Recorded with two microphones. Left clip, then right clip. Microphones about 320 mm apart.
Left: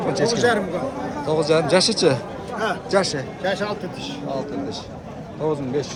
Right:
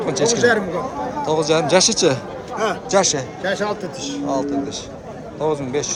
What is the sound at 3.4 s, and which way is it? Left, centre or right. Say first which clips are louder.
Speech: right 2 dB; right.